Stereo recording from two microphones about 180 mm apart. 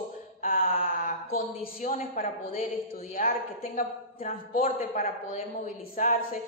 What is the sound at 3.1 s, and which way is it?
Speech, 45° left (ahead or behind).